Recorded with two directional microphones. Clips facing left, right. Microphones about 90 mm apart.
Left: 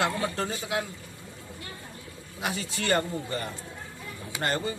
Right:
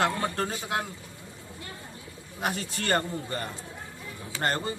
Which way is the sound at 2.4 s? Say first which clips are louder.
Right 1 dB; 45° right (ahead or behind).